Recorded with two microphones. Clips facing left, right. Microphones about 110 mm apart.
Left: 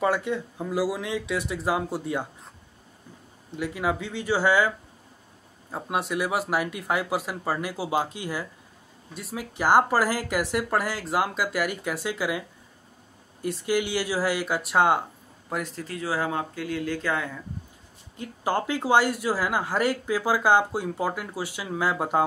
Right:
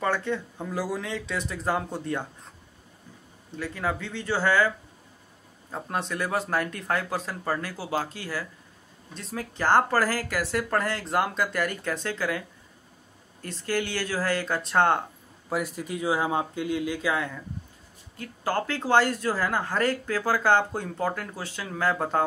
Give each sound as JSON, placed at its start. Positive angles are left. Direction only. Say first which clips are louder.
{"t": 0.0, "sound": "speech", "louder": "left 2 dB", "side_deg": 10}
{"t": 3.5, "sound": "speech", "louder": "left 3 dB", "side_deg": 15}
{"t": 15.5, "sound": "speech", "louder": "right 2 dB", "side_deg": -10}
{"t": 17.1, "sound": "speech", "louder": "even", "side_deg": 0}
{"t": 18.1, "sound": "speech", "louder": "left 1 dB", "side_deg": 20}